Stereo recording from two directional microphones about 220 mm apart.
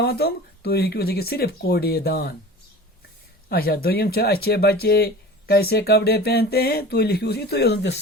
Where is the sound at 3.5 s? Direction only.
45° left (ahead or behind).